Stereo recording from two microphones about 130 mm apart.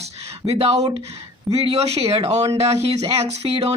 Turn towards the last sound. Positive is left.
turn(degrees=-55)  # may be behind; listen again after turning